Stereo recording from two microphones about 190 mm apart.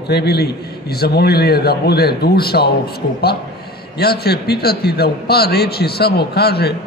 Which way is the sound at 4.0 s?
55° left (ahead or behind).